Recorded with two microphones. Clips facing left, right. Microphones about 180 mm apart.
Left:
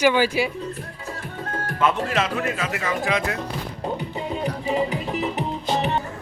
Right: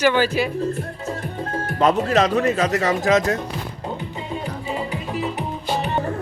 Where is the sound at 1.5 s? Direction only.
35° right (ahead or behind).